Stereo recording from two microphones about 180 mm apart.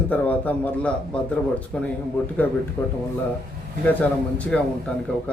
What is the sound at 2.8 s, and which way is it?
Speech, 20° left (ahead or behind).